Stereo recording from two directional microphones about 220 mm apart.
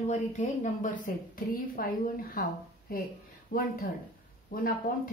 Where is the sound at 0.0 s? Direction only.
35° left (ahead or behind).